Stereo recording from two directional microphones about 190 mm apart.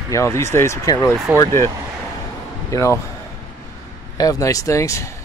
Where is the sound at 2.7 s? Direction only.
15° left (ahead or behind).